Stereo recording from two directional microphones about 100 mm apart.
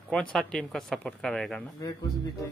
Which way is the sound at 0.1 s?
10° left (ahead or behind).